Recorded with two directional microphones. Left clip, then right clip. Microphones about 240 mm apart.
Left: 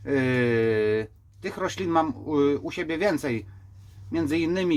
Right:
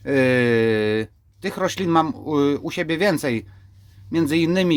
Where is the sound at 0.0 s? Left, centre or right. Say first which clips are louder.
Right 6 dB; right.